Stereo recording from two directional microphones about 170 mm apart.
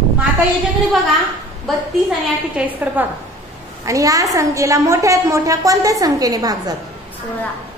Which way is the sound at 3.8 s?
20° right (ahead or behind).